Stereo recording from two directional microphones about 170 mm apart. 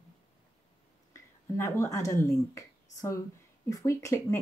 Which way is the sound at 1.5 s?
15° left (ahead or behind).